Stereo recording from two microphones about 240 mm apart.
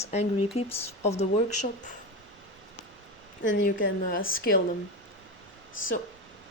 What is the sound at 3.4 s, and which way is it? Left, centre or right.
Speech, left.